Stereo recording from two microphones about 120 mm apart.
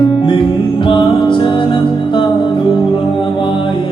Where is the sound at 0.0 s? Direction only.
45° left (ahead or behind).